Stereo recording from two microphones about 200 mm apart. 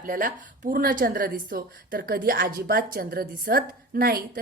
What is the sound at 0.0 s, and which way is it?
Speech, 45° right (ahead or behind).